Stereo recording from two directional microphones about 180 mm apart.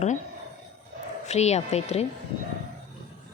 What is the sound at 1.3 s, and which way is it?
Speech, 40° left (ahead or behind).